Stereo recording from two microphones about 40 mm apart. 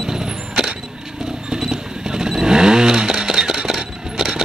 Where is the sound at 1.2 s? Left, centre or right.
Centre.